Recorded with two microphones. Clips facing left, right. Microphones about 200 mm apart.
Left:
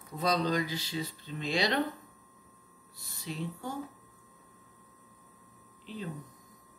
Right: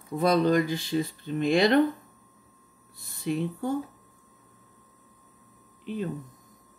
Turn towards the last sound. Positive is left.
turn(degrees=-55)  # may be behind; listen again after turning